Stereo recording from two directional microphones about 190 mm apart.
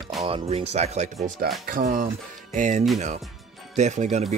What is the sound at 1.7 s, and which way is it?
Speech, 45° right (ahead or behind).